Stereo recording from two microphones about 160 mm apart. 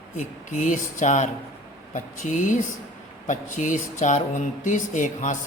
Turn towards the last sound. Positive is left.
turn(degrees=50)  # may be behind; listen again after turning